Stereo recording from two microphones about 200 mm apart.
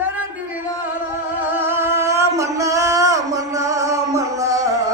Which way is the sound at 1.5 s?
10° right (ahead or behind).